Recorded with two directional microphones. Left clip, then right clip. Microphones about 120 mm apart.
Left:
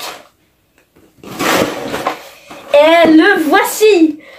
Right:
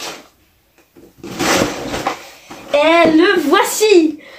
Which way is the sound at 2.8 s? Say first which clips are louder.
Left 3 dB; 25° left (ahead or behind).